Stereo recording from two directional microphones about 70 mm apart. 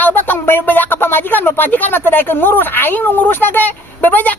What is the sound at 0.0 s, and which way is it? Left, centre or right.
A woman's voice, left.